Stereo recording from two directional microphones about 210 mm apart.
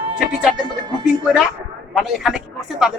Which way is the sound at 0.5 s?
20° right (ahead or behind).